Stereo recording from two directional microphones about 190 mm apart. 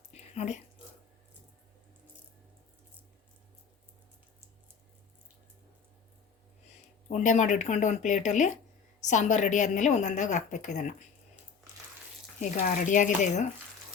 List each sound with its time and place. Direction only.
0.1 s a sound: 35° left (ahead or behind)
7.1 s a woman's voice: 40° left (ahead or behind)
12.4 s a woman's voice: 40° left (ahead or behind)